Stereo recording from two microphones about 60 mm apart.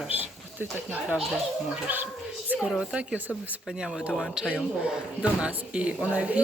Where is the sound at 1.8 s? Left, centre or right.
Right.